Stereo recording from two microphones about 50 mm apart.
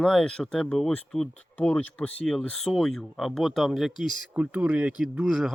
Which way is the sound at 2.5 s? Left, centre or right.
Centre.